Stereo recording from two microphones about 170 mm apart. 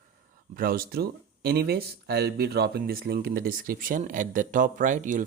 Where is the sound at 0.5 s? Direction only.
60° right (ahead or behind).